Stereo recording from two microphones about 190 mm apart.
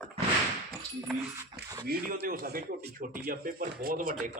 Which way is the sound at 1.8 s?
55° right (ahead or behind).